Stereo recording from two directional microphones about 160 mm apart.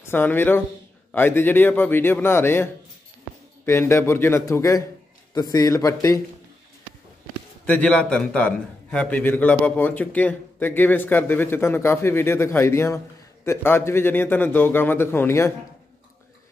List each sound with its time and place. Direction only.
0.0 s a man's voice: 15° left (ahead or behind)
7.6 s a man's voice: 10° left (ahead or behind)